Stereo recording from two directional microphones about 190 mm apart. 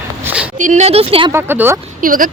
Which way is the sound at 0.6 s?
40° right (ahead or behind).